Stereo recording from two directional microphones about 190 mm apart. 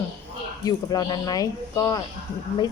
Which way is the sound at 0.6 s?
20° left (ahead or behind).